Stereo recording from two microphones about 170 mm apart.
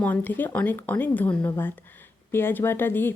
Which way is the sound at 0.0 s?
10° left (ahead or behind).